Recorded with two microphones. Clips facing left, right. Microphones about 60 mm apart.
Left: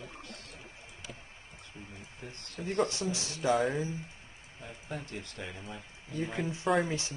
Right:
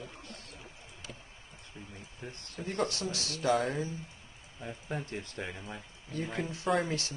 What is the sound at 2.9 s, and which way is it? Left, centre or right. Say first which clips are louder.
Speech: left 1 dB; left.